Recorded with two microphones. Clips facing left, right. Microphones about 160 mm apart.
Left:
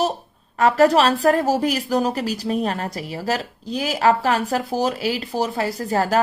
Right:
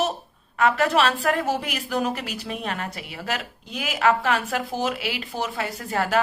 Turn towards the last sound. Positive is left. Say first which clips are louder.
# left 5 dB
turn(degrees=35)  # may be behind; listen again after turning